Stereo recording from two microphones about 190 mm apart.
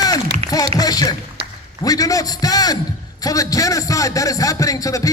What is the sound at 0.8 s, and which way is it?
A man's voice, 20° left (ahead or behind).